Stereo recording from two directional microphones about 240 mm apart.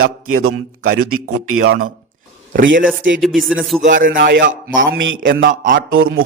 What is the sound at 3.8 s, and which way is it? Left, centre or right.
A man's voice, right.